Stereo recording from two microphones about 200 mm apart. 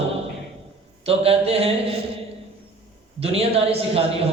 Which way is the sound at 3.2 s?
30° right (ahead or behind).